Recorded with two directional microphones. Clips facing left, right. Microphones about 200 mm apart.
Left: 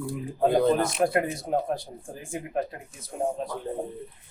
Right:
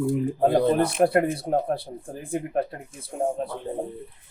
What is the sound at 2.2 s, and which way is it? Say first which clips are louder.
Speech: right 4 dB; 55° right (ahead or behind).